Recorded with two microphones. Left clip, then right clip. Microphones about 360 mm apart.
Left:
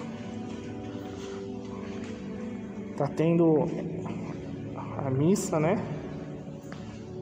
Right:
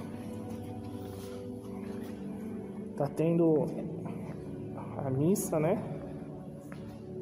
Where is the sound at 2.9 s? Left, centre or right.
Right.